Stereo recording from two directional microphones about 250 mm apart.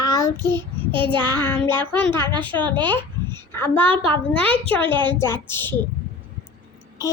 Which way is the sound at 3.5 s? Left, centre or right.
Centre.